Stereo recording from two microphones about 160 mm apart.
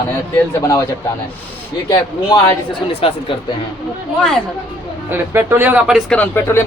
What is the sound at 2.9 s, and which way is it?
Speech, 35° left (ahead or behind).